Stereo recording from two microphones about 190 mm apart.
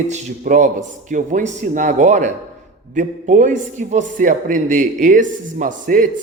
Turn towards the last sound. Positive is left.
turn(degrees=-45)  # may be behind; listen again after turning